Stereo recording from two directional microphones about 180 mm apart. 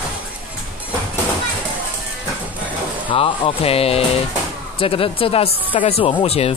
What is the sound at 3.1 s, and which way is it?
Speech, 30° left (ahead or behind).